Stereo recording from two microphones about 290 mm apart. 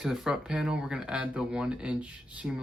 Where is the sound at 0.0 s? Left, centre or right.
Centre.